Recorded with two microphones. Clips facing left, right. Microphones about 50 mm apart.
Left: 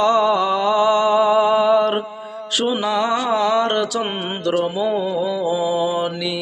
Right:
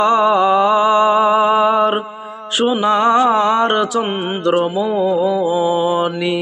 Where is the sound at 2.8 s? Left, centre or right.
Right.